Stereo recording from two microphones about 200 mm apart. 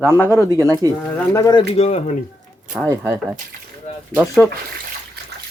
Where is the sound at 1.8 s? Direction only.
35° left (ahead or behind).